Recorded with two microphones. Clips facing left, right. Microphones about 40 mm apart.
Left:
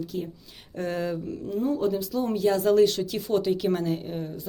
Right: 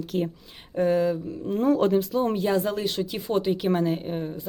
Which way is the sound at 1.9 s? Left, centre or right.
Right.